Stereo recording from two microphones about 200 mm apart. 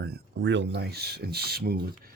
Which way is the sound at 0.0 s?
55° right (ahead or behind).